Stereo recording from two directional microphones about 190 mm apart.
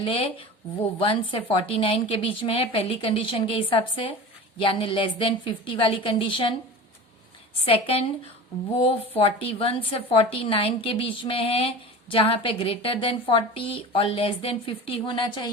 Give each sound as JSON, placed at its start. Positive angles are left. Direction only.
{"t": 0.0, "sound": "a woman's voice", "side_deg": 30}
{"t": 7.6, "sound": "a woman's voice", "side_deg": 30}